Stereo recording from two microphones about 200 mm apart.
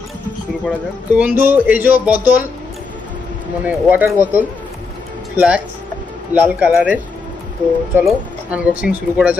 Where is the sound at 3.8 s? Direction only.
10° right (ahead or behind).